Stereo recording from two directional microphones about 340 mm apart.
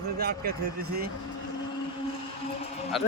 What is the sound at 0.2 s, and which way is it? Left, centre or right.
Speech, right.